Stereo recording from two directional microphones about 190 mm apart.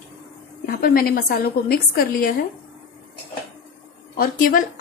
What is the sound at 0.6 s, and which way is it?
A woman's voice, 50° left (ahead or behind).